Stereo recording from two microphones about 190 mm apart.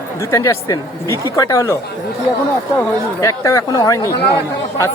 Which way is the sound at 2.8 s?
15° left (ahead or behind).